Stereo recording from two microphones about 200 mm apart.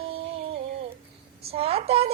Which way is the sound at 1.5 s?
30° right (ahead or behind).